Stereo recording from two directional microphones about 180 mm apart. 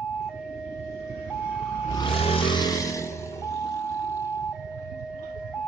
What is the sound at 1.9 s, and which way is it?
Music, 30° left (ahead or behind).